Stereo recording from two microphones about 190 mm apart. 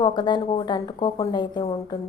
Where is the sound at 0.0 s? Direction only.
25° left (ahead or behind).